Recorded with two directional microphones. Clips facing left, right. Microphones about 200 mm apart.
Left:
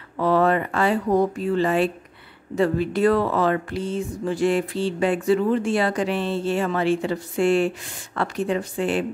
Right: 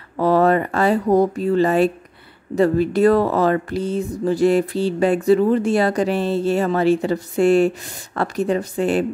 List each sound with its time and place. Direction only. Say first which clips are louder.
0.2 s speech: right 4 dB; 40° right (ahead or behind)